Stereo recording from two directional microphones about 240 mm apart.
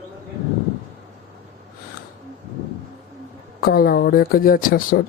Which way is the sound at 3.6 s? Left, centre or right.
Left.